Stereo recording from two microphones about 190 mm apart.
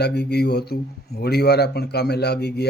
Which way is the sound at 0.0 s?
60° left (ahead or behind).